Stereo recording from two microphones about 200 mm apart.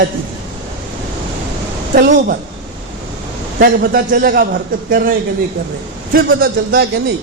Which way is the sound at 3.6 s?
50° right (ahead or behind).